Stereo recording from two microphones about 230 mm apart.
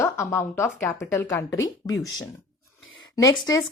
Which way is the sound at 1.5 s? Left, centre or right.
Left.